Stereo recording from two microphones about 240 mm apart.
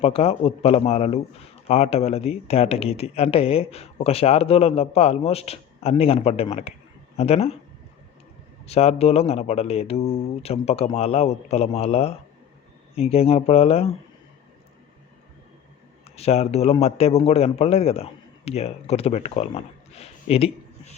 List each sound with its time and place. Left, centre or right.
0.0 s speech: left
8.6 s speech: left
16.1 s a man's voice: left